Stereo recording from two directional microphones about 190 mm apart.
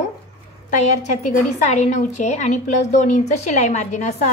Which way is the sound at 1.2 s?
40° left (ahead or behind).